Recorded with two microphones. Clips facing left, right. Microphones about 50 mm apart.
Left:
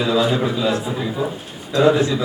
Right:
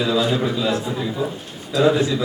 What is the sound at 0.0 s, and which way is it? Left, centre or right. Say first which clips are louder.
A man's voice: left 2 dB; centre.